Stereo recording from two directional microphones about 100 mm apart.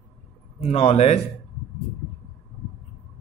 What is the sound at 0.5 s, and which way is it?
Speech, 90° left.